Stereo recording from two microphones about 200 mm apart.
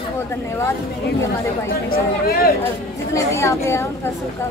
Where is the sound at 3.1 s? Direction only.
15° left (ahead or behind).